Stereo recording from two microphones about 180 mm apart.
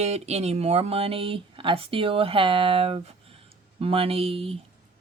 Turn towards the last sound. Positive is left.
turn(degrees=-35)  # may be behind; listen again after turning